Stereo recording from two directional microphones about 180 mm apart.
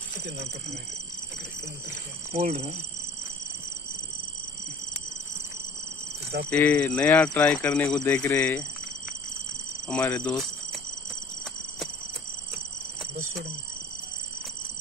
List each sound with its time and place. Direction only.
2.3 s speech: 40° right (ahead or behind)
6.5 s speech: 10° left (ahead or behind)
9.8 s speech: 10° left (ahead or behind)